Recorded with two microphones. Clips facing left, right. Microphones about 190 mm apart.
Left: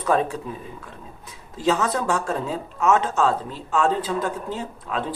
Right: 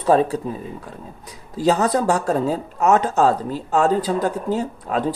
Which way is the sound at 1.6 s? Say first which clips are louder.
Right 4 dB; 40° right (ahead or behind).